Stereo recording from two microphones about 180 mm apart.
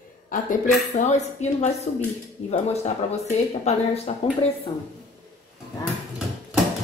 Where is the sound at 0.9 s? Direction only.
40° left (ahead or behind).